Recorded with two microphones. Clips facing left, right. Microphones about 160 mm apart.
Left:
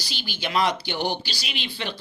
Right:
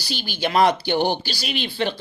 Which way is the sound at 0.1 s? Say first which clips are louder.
Right 5 dB; 45° right (ahead or behind).